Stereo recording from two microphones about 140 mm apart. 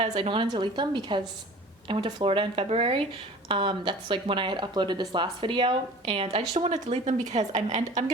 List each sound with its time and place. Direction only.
0.2 s a woman's voice: 40° right (ahead or behind); by 8.0 s 55° right (ahead or behind)